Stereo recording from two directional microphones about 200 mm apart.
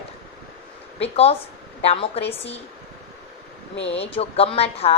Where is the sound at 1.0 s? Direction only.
30° left (ahead or behind).